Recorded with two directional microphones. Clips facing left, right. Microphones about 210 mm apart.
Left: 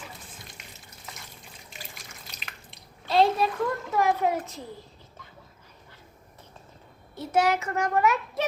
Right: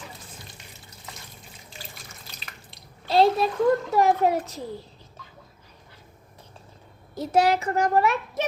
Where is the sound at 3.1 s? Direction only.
30° right (ahead or behind).